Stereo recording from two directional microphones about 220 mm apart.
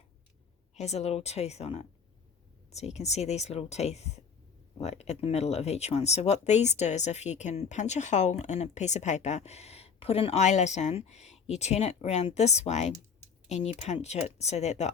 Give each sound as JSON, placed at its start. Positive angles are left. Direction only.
{"t": 0.8, "sound": "speech", "side_deg": 30}